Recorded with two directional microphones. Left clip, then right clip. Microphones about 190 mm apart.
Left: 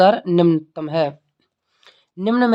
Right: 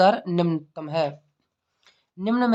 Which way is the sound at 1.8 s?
35° left (ahead or behind).